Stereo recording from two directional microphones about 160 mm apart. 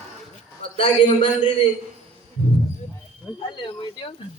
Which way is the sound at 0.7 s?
35° left (ahead or behind).